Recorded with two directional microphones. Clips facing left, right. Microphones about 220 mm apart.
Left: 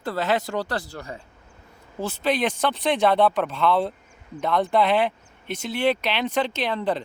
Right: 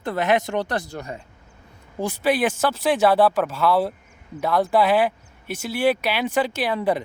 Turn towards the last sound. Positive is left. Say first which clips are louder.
# right 3 dB
turn(degrees=-10)  # may be behind; listen again after turning